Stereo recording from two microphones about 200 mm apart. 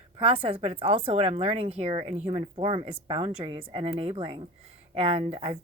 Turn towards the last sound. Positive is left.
turn(degrees=-30)  # may be behind; listen again after turning